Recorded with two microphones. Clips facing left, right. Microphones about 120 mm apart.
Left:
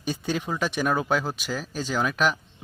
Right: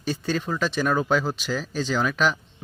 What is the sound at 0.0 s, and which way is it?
Speech, 10° left (ahead or behind).